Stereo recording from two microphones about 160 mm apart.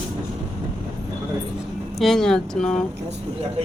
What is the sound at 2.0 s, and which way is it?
Speech, 5° left (ahead or behind).